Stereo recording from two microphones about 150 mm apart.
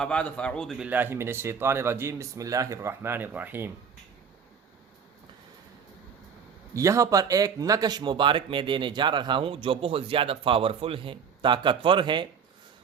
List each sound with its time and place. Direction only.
0.0 s a man's voice: 5° left (ahead or behind)
0.8 s speech: 10° right (ahead or behind)
6.7 s speech: 20° right (ahead or behind)